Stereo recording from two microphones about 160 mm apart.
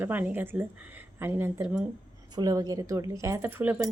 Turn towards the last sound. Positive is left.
turn(degrees=-10)  # may be behind; listen again after turning